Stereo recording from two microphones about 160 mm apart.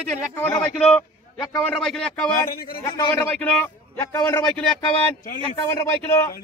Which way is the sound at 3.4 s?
10° left (ahead or behind).